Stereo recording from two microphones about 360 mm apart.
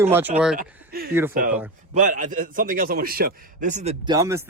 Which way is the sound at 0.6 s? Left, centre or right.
Right.